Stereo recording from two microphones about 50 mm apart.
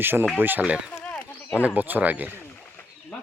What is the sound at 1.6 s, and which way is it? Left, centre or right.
Speech, right.